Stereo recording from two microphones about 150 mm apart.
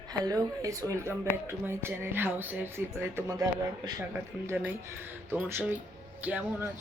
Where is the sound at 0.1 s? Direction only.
25° right (ahead or behind).